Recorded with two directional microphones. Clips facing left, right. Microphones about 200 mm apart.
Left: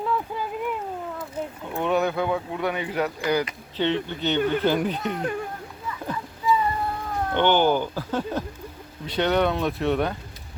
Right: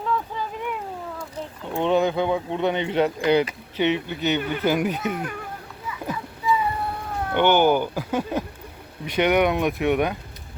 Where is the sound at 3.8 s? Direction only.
10° right (ahead or behind).